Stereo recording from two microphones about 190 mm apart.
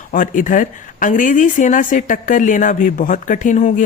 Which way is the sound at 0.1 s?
45° left (ahead or behind).